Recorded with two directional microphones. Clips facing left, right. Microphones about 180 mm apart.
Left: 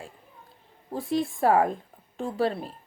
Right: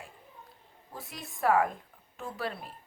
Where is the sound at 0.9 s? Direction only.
30° left (ahead or behind).